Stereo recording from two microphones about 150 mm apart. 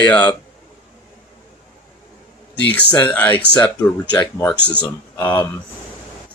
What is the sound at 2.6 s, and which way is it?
Mantra, 10° left (ahead or behind).